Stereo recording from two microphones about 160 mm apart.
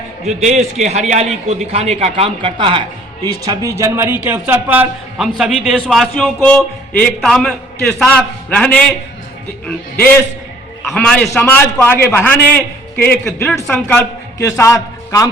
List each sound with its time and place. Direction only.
0.3 s a man's voice: 45° right (ahead or behind)
3.2 s a man's voice: 20° right (ahead or behind); by 8.8 s 5° left (ahead or behind)
10.9 s a man's voice: 5° left (ahead or behind)
13.8 s a man's voice: 15° left (ahead or behind)